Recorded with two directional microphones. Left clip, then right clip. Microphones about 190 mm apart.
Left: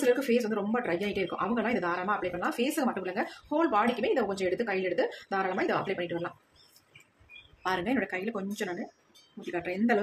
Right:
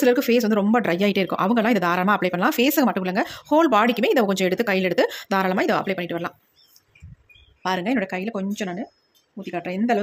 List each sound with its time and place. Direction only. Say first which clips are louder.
0.0 s speech: right 8 dB; 55° right (ahead or behind)
7.6 s speech: right 6 dB; 40° right (ahead or behind)